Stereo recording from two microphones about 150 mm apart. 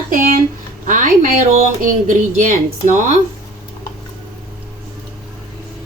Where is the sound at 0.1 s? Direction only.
65° right (ahead or behind).